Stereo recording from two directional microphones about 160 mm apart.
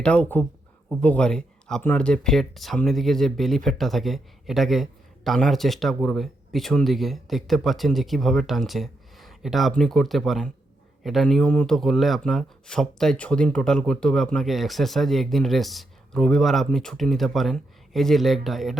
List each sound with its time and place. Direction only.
0.0 s speech: 10° left (ahead or behind)